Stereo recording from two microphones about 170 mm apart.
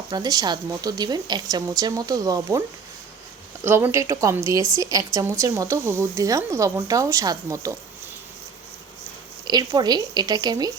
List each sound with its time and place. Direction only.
0.1 s speech: 20° right (ahead or behind)
9.5 s speech: 25° right (ahead or behind)